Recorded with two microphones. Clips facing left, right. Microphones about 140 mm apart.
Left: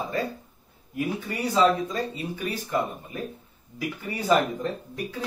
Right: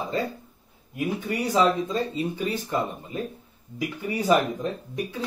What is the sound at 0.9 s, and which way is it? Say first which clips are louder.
Speech: right 2 dB; 20° right (ahead or behind).